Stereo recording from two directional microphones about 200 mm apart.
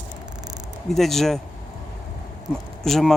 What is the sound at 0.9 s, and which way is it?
Speech, centre (ahead or behind).